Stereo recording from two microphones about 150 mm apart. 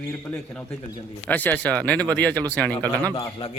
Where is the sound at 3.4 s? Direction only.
35° left (ahead or behind).